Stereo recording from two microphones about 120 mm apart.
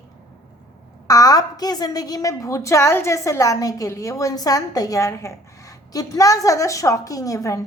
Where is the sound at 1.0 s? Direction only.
30° left (ahead or behind).